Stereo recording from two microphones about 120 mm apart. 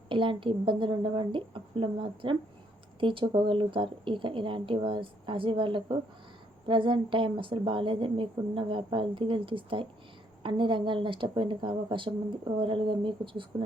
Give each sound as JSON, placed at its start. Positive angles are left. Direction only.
{"t": 0.1, "sound": "a woman's voice", "side_deg": -45}